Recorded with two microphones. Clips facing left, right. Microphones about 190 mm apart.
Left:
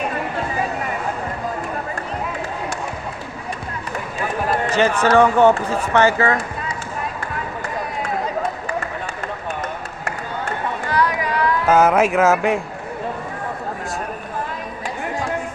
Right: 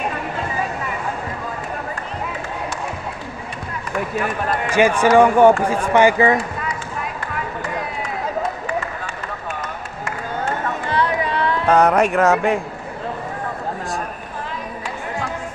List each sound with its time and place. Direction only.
4.6 s speech: 10° right (ahead or behind)
10.9 s a sound: 25° right (ahead or behind)
11.6 s speech: 5° left (ahead or behind)